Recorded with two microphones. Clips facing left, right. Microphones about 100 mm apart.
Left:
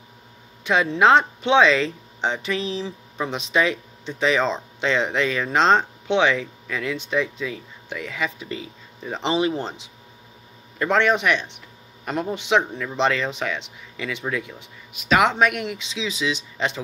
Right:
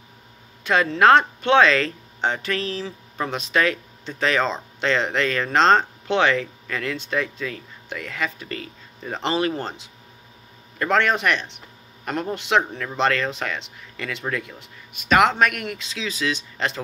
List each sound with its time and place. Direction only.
0.7 s speech: 15° left (ahead or behind)
10.8 s speech: 15° left (ahead or behind)